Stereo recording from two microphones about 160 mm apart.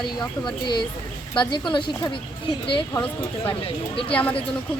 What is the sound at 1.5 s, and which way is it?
Speech, 30° left (ahead or behind).